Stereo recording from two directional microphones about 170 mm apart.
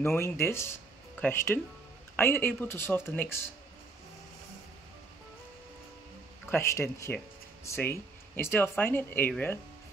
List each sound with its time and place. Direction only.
0.0 s speech: 15° left (ahead or behind)
6.5 s speech: 15° left (ahead or behind)